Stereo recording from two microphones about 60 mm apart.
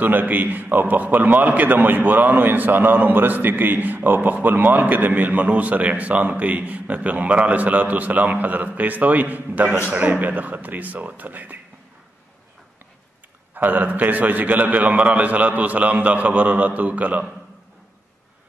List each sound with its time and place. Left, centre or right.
0.0 s a man's voice: right
13.6 s a man's voice: right